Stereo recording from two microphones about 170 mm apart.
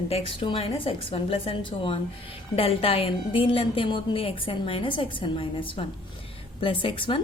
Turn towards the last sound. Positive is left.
turn(degrees=30)  # may be behind; listen again after turning